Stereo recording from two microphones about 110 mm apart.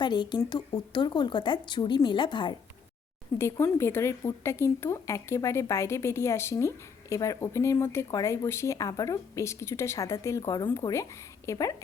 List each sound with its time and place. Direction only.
0.0 s speech: 40° left (ahead or behind)
3.3 s speech: 25° left (ahead or behind)